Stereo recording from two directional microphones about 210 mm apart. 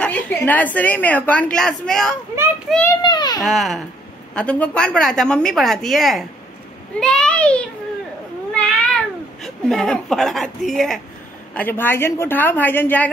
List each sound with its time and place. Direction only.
0.0 s a sound: 5° left (ahead or behind)
0.7 s a woman's voice: 5° left (ahead or behind)
3.0 s baby cry: 20° left (ahead or behind)
3.4 s a woman's voice: centre (ahead or behind)
7.0 s a sound: 5° left (ahead or behind)
8.5 s cat: 5° left (ahead or behind)
11.5 s a woman's voice: 10° left (ahead or behind)